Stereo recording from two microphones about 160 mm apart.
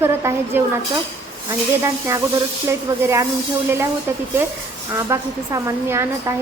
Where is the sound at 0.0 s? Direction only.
15° right (ahead or behind).